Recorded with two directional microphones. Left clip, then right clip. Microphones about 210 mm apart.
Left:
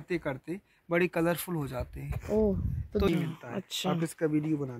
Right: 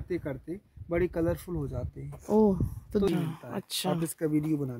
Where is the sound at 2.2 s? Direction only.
45° right (ahead or behind).